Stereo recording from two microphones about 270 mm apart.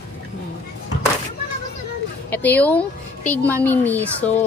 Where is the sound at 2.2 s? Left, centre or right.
Centre.